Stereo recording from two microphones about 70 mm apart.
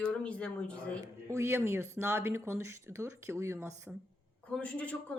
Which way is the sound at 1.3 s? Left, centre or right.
Right.